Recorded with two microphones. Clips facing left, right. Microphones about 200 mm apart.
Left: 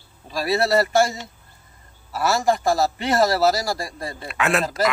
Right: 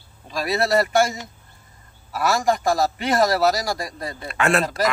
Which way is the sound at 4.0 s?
30° left (ahead or behind).